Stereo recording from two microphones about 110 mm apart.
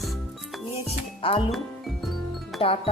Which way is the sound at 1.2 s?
55° left (ahead or behind).